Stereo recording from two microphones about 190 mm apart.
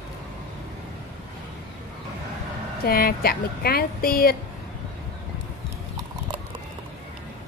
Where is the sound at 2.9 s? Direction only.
55° left (ahead or behind).